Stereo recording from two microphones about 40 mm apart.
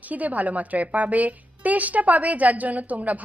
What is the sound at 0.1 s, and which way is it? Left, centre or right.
A woman's voice, right.